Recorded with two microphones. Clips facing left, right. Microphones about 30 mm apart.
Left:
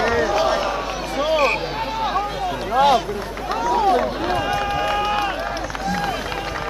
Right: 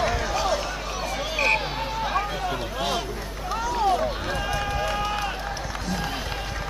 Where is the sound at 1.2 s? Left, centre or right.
Centre.